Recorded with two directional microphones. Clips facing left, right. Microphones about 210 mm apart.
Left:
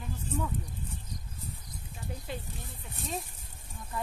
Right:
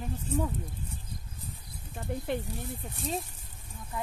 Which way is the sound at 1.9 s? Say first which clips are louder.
Right 8 dB; 60° right (ahead or behind).